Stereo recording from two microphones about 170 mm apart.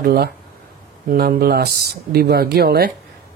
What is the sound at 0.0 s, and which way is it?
Speech, 65° right (ahead or behind).